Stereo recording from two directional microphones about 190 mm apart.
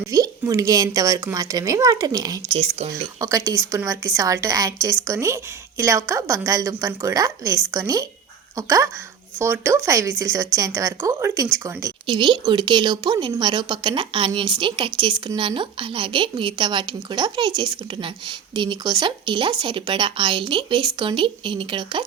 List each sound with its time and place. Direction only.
0.1 s speech: 15° right (ahead or behind)
2.6 s speech: 35° right (ahead or behind)
3.2 s speech: 15° right (ahead or behind)